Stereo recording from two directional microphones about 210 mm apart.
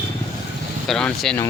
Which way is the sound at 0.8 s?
Centre (ahead or behind).